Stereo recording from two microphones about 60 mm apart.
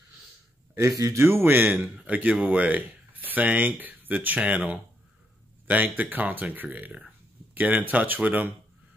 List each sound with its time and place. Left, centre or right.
0.7 s speech: right
2.0 s speech: right